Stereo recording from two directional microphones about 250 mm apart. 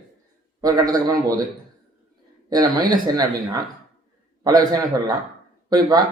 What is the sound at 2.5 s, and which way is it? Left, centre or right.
A man's voice, centre.